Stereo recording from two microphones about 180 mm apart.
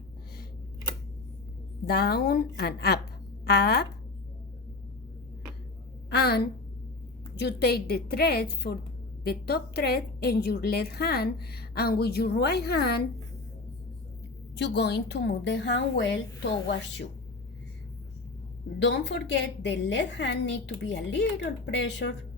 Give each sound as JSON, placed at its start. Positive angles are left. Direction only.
{"t": 1.9, "sound": "a woman's voice", "side_deg": 60}
{"t": 6.1, "sound": "a woman's voice", "side_deg": 60}
{"t": 14.6, "sound": "a woman's voice", "side_deg": 70}
{"t": 18.8, "sound": "a woman's voice", "side_deg": 80}